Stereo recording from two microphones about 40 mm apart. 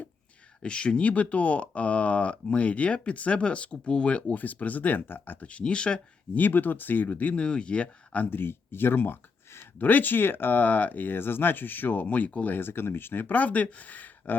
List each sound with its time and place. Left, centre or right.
0.6 s speech: left
1.0 s speech: left
4.4 s speech: left
5.5 s speech: left
6.3 s speech: left
7.3 s speech: left
8.3 s speech: left
9.8 s speech: left
12.5 s speech: left